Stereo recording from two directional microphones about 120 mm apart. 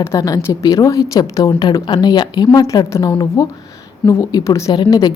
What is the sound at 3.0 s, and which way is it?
Speech, 40° left (ahead or behind).